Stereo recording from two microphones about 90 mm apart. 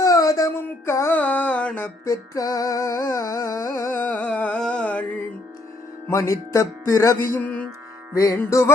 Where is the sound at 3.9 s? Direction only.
20° left (ahead or behind).